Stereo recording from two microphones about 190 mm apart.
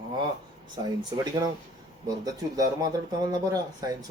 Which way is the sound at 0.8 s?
20° right (ahead or behind).